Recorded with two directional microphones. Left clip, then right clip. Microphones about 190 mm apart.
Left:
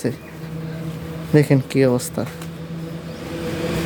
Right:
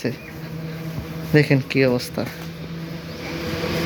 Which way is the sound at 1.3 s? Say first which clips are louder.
Left 1 dB; 20° left (ahead or behind).